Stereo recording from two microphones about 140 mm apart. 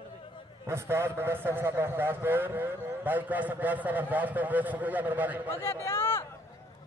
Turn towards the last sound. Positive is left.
turn(degrees=15)  # may be behind; listen again after turning